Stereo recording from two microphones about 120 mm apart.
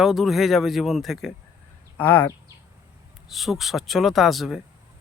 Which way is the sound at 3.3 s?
Centre (ahead or behind).